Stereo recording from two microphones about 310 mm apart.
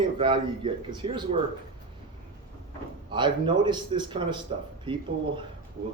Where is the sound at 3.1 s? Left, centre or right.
Centre.